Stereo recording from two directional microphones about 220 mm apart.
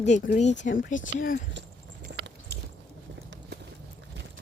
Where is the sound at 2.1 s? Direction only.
50° right (ahead or behind).